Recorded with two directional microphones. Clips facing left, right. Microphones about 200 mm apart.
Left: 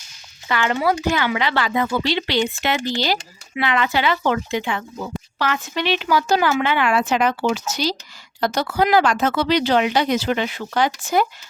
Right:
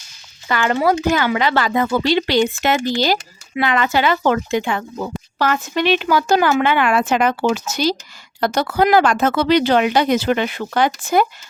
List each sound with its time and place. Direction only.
0.4 s speech: 40° right (ahead or behind)